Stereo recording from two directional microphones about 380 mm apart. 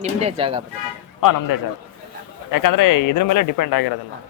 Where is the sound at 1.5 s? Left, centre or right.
Left.